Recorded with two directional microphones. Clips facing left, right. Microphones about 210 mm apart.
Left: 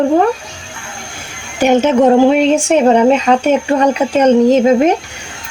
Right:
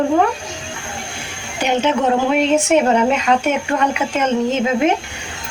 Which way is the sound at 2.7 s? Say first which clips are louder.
Left 5 dB; 35° left (ahead or behind).